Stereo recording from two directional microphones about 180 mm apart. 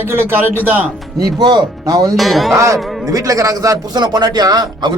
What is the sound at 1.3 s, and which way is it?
Speech, 25° right (ahead or behind).